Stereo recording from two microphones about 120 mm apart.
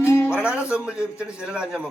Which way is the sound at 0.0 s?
20° left (ahead or behind).